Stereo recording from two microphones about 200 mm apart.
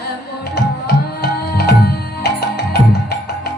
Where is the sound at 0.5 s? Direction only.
50° left (ahead or behind).